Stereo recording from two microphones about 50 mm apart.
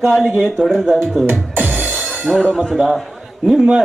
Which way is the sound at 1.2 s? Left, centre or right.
Right.